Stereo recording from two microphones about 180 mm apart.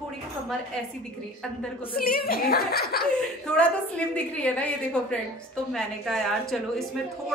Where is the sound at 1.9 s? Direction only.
55° left (ahead or behind).